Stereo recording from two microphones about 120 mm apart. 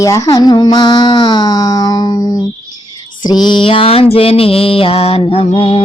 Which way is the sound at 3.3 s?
40° left (ahead or behind).